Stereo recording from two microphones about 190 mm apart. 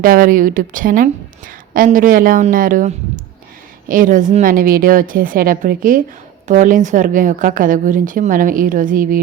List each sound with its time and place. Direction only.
0.0 s a woman's voice: 45° right (ahead or behind)